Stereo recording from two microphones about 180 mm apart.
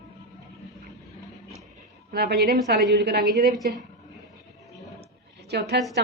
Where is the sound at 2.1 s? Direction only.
60° right (ahead or behind).